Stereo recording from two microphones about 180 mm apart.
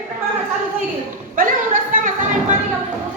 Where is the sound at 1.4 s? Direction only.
50° right (ahead or behind).